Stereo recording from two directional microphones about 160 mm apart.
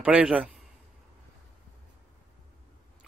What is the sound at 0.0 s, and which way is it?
Speech, 5° right (ahead or behind).